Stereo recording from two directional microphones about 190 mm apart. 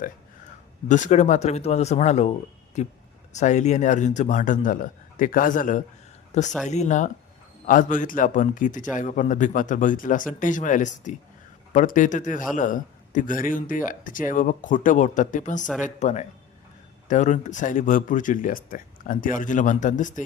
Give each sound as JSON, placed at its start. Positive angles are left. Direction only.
{"t": 0.9, "sound": "speech", "side_deg": 40}
{"t": 3.3, "sound": "speech", "side_deg": 40}